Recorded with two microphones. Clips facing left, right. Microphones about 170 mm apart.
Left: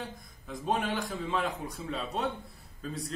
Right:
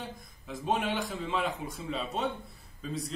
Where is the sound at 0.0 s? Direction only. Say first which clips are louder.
Left 1 dB; centre (ahead or behind).